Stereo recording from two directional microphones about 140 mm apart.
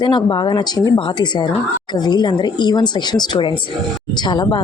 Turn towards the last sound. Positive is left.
turn(degrees=35)  # may be behind; listen again after turning